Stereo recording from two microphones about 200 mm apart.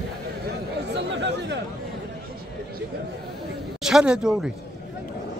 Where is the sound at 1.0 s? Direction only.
60° right (ahead or behind).